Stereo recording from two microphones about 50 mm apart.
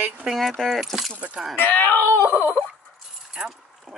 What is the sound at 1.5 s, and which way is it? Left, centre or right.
Speech, left.